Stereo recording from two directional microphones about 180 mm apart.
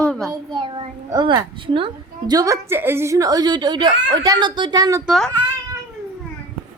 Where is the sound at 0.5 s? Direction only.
25° right (ahead or behind).